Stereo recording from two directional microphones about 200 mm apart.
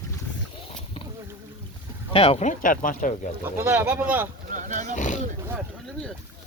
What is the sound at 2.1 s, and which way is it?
Speech, 30° left (ahead or behind).